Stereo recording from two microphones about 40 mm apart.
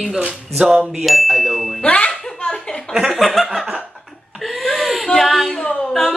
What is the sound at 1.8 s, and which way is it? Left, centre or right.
Smoke detector, left.